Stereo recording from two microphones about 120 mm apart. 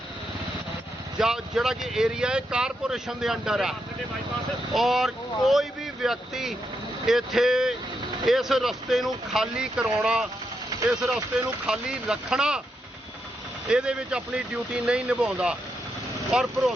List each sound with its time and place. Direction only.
1.2 s speech: 5° right (ahead or behind)
13.7 s speech: 10° right (ahead or behind)